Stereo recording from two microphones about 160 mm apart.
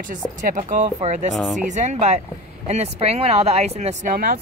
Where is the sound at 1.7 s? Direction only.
50° right (ahead or behind).